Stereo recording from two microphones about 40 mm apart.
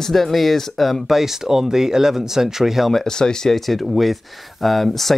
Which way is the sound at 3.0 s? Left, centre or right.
Centre.